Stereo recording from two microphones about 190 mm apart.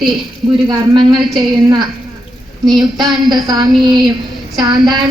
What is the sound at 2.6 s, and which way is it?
Speech, centre (ahead or behind).